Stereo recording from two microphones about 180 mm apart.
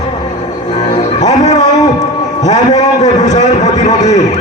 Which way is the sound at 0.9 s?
40° left (ahead or behind).